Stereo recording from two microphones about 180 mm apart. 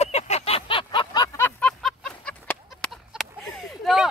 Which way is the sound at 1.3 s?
15° left (ahead or behind).